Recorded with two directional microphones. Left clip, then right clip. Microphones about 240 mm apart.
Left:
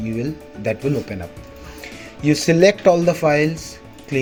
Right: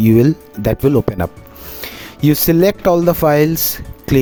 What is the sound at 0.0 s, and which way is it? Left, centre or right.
Speech, right.